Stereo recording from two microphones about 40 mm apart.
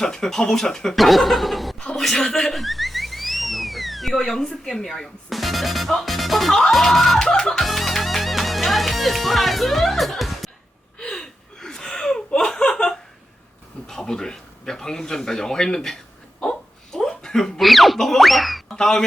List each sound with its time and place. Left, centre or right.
0.0 s speech: centre
0.9 s a sound: centre
4.2 s speech: centre
7.2 s speech: centre
7.6 s music: centre
10.9 s gasp: centre
13.8 s speech: centre
16.4 s laughter: centre
17.6 s speech: centre
18.7 s speech: centre